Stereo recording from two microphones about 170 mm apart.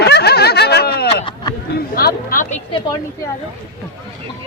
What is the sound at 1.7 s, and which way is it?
Chatter, 65° left (ahead or behind).